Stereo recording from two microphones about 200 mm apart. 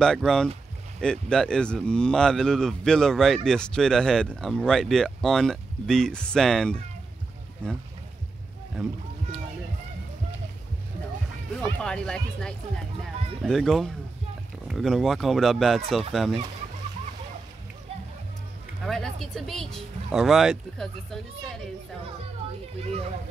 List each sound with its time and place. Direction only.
0.0 s speech: 5° left (ahead or behind)
11.6 s speech: 5° left (ahead or behind)
18.9 s speech: centre (ahead or behind)